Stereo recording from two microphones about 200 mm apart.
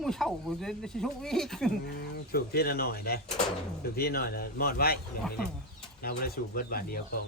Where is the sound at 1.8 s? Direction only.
55° left (ahead or behind).